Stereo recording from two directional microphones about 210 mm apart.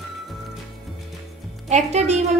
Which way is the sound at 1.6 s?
35° right (ahead or behind).